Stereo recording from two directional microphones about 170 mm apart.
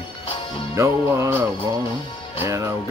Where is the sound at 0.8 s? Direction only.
15° right (ahead or behind).